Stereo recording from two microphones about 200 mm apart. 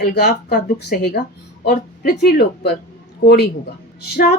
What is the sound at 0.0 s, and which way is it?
Speech, 50° left (ahead or behind).